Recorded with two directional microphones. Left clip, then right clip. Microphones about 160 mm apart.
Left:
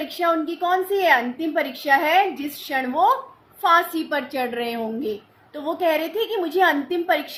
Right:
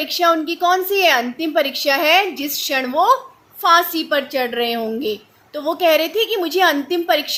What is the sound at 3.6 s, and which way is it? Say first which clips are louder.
A woman's voice: right 4 dB; 55° right (ahead or behind).